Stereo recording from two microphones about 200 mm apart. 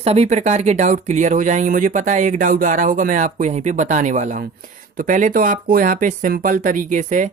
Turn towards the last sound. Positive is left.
turn(degrees=-40)  # may be behind; listen again after turning